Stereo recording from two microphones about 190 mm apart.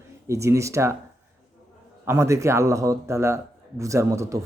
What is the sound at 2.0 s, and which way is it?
Speech, 15° right (ahead or behind).